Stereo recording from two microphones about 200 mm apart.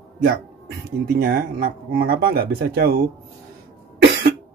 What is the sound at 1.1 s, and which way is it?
Speech, 45° right (ahead or behind).